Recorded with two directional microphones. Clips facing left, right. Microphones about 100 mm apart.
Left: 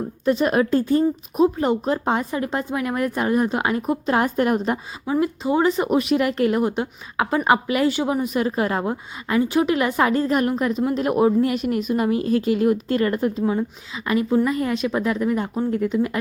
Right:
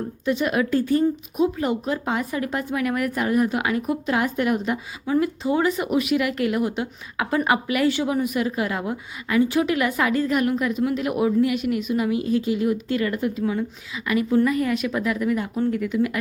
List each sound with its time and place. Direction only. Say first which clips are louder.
0.3 s a woman's voice: left 3 dB; 40° left (ahead or behind)
5.2 s a woman's voice: left 5 dB; 25° left (ahead or behind)
13.4 s a woman's voice: left 2 dB; 25° left (ahead or behind)